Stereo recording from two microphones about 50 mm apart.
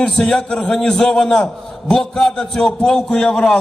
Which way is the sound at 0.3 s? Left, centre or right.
Centre.